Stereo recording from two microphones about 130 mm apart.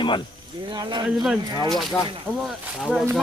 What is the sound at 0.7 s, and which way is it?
Speech, 35° right (ahead or behind).